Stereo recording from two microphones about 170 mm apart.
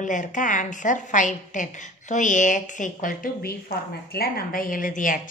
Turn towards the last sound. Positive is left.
turn(degrees=50)  # may be behind; listen again after turning